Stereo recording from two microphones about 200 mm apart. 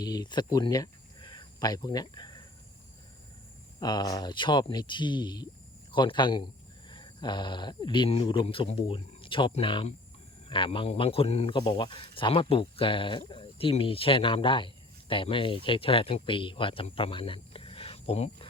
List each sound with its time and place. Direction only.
0.0 s speech: 20° left (ahead or behind)
3.8 s speech: 20° left (ahead or behind)